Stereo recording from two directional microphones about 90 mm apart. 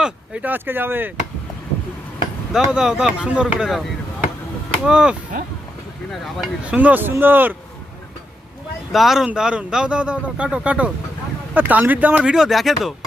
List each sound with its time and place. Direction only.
0.0 s speech: 15° right (ahead or behind)
2.5 s speech: 5° right (ahead or behind)
4.9 s speech: 10° right (ahead or behind)
6.2 s speech: centre (ahead or behind)
6.7 s speech: 15° right (ahead or behind)
8.9 s speech: centre (ahead or behind)